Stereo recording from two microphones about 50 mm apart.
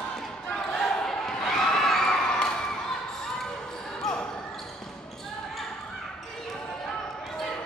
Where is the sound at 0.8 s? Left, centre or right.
Centre.